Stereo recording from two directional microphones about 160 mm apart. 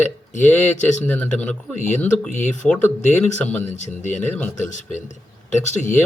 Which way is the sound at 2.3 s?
50° left (ahead or behind).